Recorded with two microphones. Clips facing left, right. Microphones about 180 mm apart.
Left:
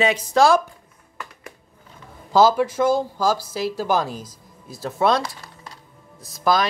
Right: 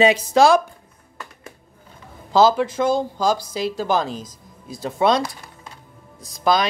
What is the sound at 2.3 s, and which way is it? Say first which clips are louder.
Speech: even; 10° left (ahead or behind).